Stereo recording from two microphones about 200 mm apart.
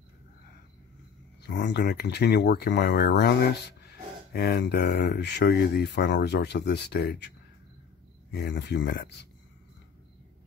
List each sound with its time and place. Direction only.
1.4 s speech: 60° left (ahead or behind)
8.3 s speech: 55° left (ahead or behind)